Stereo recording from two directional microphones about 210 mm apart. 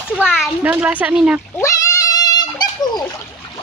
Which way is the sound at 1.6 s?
15° left (ahead or behind).